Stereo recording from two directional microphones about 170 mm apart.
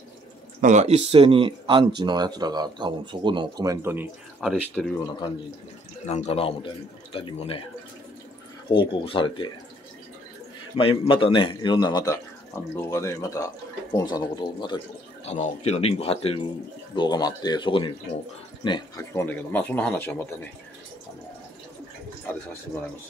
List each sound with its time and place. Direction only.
0.6 s speech: 45° right (ahead or behind); by 4.5 s 10° right (ahead or behind)
4.8 s speech: centre (ahead or behind)
6.0 s speech: 40° left (ahead or behind)
8.6 s a man's voice: 30° left (ahead or behind)
10.8 s a man's voice: 30° left (ahead or behind)
15.2 s a man's voice: 40° left (ahead or behind); by 20.3 s 10° left (ahead or behind)